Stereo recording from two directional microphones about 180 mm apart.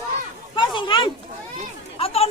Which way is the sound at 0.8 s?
25° left (ahead or behind).